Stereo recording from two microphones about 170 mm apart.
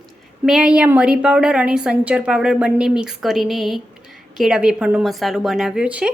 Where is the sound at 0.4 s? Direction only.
5° right (ahead or behind).